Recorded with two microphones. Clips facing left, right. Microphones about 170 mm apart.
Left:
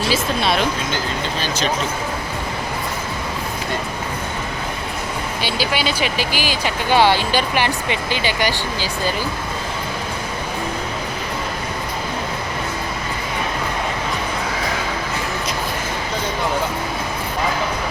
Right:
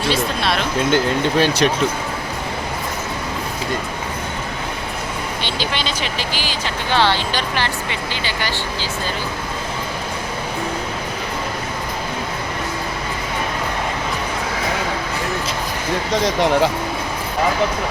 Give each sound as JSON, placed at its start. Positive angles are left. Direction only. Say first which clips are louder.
{"t": 0.1, "sound": "a sound", "louder": "even", "side_deg": 0}
{"t": 0.9, "sound": "speech", "louder": "right 7 dB", "side_deg": -60}
{"t": 5.4, "sound": "speech", "louder": "left 4 dB", "side_deg": 10}
{"t": 16.2, "sound": "speech", "louder": "right 6 dB", "side_deg": -90}